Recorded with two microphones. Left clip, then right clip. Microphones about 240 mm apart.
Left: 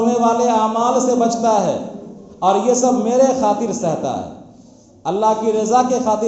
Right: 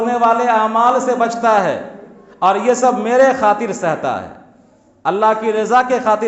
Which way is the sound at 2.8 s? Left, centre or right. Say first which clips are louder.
Right 3 dB; right.